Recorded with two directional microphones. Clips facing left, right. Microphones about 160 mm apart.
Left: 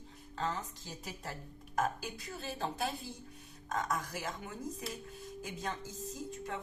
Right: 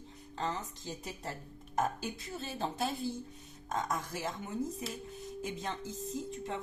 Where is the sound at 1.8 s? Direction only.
25° right (ahead or behind).